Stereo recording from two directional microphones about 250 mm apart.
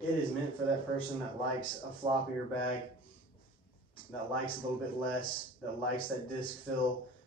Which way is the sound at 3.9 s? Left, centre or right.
Left.